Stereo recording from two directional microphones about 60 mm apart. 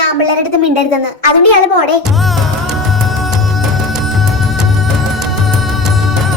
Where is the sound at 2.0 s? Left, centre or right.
Centre.